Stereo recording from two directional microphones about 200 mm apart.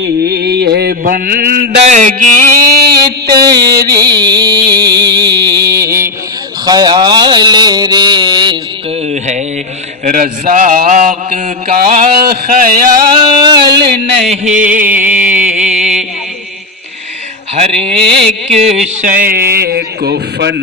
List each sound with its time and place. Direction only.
0.0 s mantra: 55° right (ahead or behind); by 2.4 s 40° right (ahead or behind)
2.8 s a sound: 50° right (ahead or behind)
3.1 s music: 20° right (ahead or behind)
5.2 s music: 55° right (ahead or behind)
5.5 s mantra: 20° right (ahead or behind)
10.0 s mantra: 45° right (ahead or behind)
13.1 s a sound: 20° right (ahead or behind)
14.3 s music: 40° right (ahead or behind)
17.6 s music: 30° right (ahead or behind)
19.2 s mantra: 50° right (ahead or behind)